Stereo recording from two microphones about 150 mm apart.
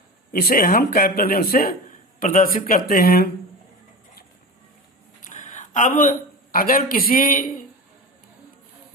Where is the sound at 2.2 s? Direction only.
60° left (ahead or behind); by 3.3 s 90° left.